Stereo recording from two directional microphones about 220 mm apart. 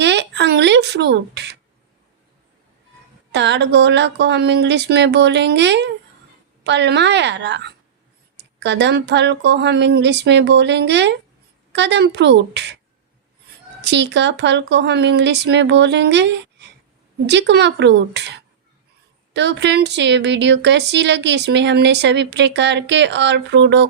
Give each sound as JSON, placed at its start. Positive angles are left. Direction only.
{"t": 0.0, "sound": "a sound", "side_deg": -50}
{"t": 3.3, "sound": "a woman's voice", "side_deg": -50}
{"t": 13.8, "sound": "a woman's voice", "side_deg": -50}